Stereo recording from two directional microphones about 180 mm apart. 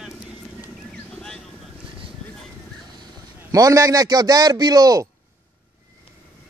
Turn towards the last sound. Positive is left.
turn(degrees=-20)  # may be behind; listen again after turning